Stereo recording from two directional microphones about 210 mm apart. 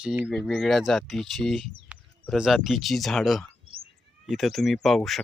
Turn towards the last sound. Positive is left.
turn(degrees=0)  # may be behind; listen again after turning